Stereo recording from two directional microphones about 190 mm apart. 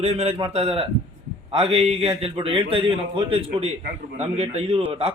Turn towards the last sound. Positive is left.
turn(degrees=-35)  # may be behind; listen again after turning